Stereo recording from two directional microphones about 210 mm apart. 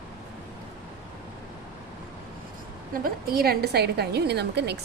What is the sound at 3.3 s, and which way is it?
A woman's voice, 45° right (ahead or behind).